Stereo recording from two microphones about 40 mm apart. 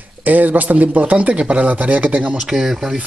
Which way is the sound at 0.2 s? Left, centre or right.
Right.